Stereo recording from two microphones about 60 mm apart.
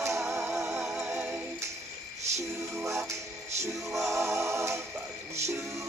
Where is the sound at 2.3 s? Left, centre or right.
Right.